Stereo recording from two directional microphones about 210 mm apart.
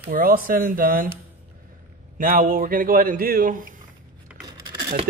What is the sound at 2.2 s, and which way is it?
Speech, 45° right (ahead or behind).